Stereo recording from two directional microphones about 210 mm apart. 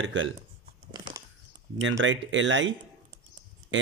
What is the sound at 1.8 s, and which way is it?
Speech, 65° right (ahead or behind).